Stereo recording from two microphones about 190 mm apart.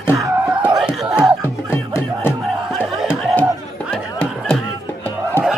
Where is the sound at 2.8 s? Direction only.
Centre (ahead or behind).